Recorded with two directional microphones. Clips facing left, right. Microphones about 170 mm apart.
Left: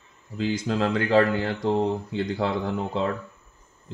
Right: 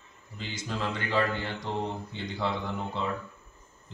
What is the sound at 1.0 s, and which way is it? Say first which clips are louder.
A man's voice: left 8 dB; 45° left (ahead or behind).